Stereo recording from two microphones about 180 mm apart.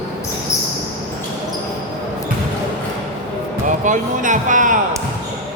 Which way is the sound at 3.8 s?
45° right (ahead or behind).